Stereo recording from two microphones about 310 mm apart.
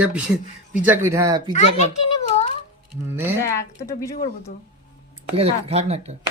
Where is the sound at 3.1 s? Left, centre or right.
Centre.